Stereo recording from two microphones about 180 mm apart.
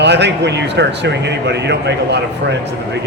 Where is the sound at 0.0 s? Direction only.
70° right (ahead or behind).